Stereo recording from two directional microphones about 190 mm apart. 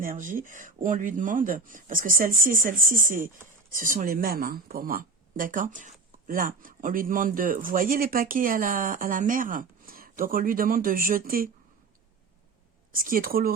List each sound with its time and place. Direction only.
0.0 s speech: 45° right (ahead or behind)
12.9 s speech: 50° right (ahead or behind)